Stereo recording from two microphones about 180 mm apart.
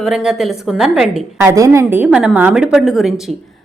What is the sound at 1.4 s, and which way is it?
A woman's voice, 15° right (ahead or behind).